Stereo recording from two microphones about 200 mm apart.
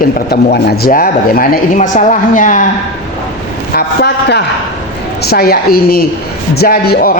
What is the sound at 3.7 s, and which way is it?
A man's voice, 55° left (ahead or behind).